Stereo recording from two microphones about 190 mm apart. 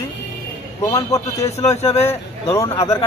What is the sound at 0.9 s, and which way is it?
A man's voice, 20° left (ahead or behind).